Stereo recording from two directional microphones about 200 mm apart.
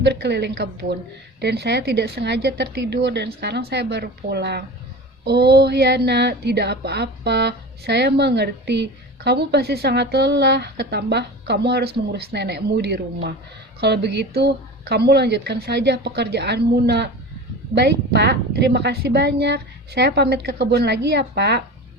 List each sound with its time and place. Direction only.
0.0 s speech: 55° right (ahead or behind)